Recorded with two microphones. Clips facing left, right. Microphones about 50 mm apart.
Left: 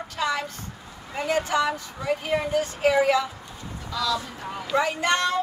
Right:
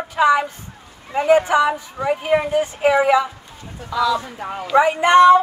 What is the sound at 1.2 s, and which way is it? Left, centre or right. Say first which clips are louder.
Speech: right 9 dB; right.